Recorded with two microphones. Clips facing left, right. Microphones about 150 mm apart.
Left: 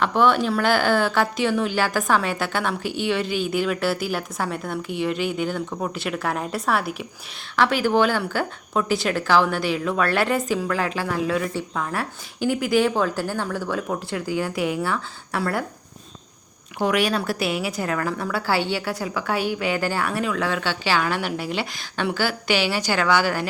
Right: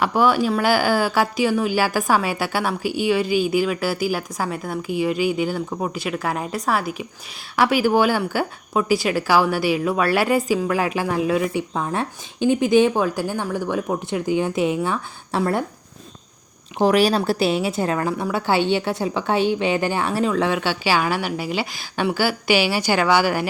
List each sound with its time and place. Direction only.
0.0 s speech: 5° right (ahead or behind)
7.5 s a woman's voice: 10° right (ahead or behind)
16.8 s a woman's voice: 35° right (ahead or behind)
20.5 s a woman's voice: 15° right (ahead or behind)